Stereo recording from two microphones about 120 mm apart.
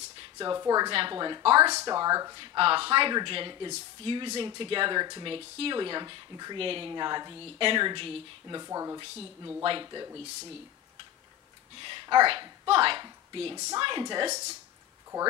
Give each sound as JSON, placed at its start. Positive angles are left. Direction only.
{"t": 0.4, "sound": "a woman's voice", "side_deg": -30}
{"t": 1.7, "sound": "speech", "side_deg": -30}
{"t": 2.4, "sound": "speech", "side_deg": -45}
{"t": 6.6, "sound": "a woman's voice", "side_deg": -50}
{"t": 7.3, "sound": "speech", "side_deg": -50}
{"t": 8.6, "sound": "speech", "side_deg": -25}
{"t": 9.6, "sound": "speech", "side_deg": -45}
{"t": 11.8, "sound": "a sound", "side_deg": -45}
{"t": 12.3, "sound": "a woman's voice", "side_deg": -50}